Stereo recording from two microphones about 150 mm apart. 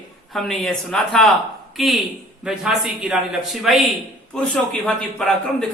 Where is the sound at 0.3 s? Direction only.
Centre (ahead or behind).